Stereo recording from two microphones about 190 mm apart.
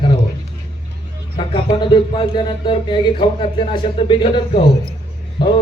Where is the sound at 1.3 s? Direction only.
25° left (ahead or behind).